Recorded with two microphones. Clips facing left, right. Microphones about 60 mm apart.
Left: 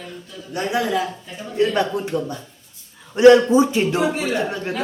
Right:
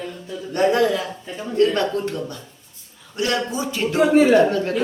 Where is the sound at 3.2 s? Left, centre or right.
Left.